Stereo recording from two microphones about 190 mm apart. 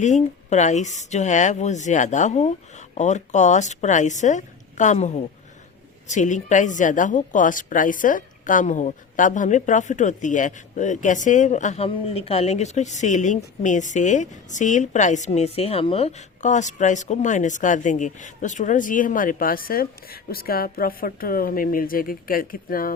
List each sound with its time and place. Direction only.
0.0 s a woman's voice: 40° left (ahead or behind)